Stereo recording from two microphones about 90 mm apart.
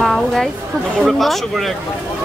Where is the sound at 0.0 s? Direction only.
5° left (ahead or behind).